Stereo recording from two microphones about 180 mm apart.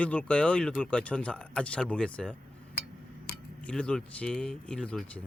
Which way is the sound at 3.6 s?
5° left (ahead or behind).